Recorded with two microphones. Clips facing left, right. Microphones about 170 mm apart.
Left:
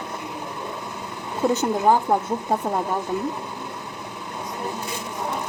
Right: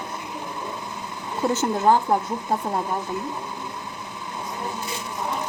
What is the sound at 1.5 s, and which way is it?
Speech, 15° left (ahead or behind).